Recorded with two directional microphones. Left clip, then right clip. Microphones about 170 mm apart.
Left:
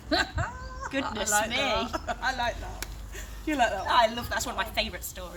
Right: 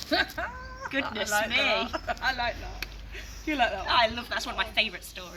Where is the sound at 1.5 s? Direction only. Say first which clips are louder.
Right 3 dB; 15° left (ahead or behind).